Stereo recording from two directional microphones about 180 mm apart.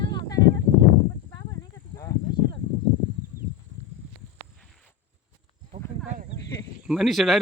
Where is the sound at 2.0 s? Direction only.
20° left (ahead or behind).